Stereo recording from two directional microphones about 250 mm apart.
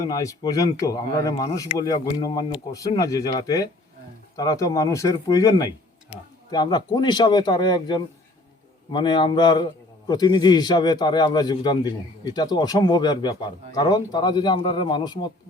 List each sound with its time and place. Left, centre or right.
0.0 s a man's voice: centre